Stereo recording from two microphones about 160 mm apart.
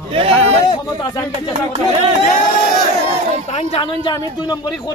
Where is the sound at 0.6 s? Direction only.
25° left (ahead or behind).